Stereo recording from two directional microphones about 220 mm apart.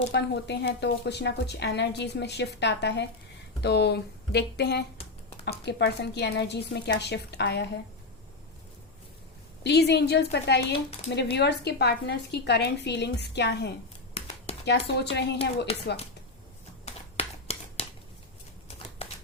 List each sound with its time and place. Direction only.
0.1 s speech: 50° left (ahead or behind)
9.6 s speech: 50° left (ahead or behind)
15.7 s speech: 25° left (ahead or behind)
16.8 s a sound: 25° left (ahead or behind)